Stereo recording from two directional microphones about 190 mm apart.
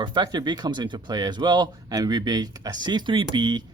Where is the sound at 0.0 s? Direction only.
25° right (ahead or behind).